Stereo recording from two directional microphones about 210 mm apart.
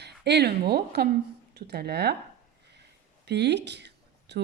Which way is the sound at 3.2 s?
55° right (ahead or behind).